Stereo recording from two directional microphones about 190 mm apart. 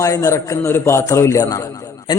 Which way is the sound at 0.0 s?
15° left (ahead or behind).